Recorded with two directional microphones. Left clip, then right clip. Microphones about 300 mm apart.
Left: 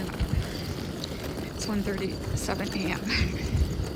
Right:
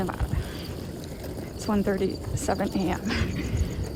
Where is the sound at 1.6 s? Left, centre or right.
Centre.